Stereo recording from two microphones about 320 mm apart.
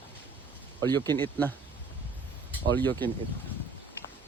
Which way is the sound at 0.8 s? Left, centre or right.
Centre.